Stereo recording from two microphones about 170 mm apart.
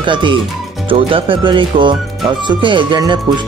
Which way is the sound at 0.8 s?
30° right (ahead or behind).